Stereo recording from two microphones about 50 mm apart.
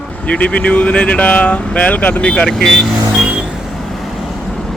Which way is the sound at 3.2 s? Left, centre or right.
Centre.